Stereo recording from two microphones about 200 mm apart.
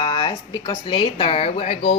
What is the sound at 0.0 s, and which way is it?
Speech, 25° left (ahead or behind).